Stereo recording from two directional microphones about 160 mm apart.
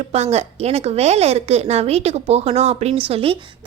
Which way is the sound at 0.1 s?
40° right (ahead or behind).